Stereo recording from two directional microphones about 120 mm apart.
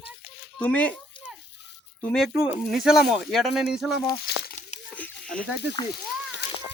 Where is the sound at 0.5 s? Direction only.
10° left (ahead or behind).